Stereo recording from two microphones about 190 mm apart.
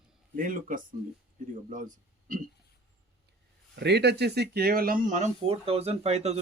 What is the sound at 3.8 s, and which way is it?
Speech, 60° right (ahead or behind).